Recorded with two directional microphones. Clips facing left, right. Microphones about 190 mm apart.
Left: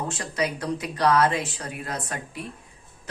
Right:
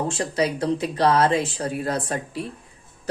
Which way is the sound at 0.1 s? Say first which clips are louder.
Right 5 dB; 30° right (ahead or behind).